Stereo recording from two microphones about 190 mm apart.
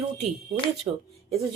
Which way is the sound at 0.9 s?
20° right (ahead or behind).